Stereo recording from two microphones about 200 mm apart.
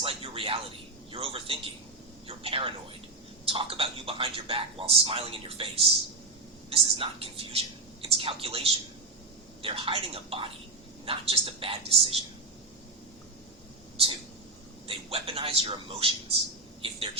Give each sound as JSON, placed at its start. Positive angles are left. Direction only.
{"t": 0.0, "sound": "a sound", "side_deg": -25}
{"t": 3.4, "sound": "a man's voice", "side_deg": -25}
{"t": 14.8, "sound": "a man's voice", "side_deg": -30}